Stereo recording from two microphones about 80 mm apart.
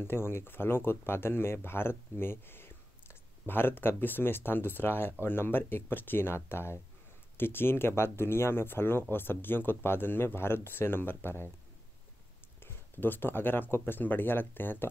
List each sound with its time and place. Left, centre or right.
0.0 s speech: left
12.6 s speech: left